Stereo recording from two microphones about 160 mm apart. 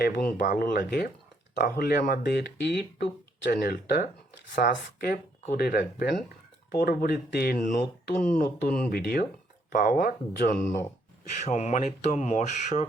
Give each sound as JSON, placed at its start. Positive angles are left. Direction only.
{"t": 0.0, "sound": "speech", "side_deg": 70}
{"t": 6.7, "sound": "speech", "side_deg": 65}
{"t": 9.7, "sound": "speech", "side_deg": 60}
{"t": 11.4, "sound": "speech", "side_deg": 50}